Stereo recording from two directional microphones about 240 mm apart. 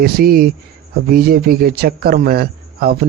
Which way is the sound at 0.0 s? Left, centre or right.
Right.